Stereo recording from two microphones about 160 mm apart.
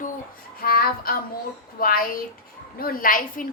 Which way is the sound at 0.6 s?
65° left (ahead or behind).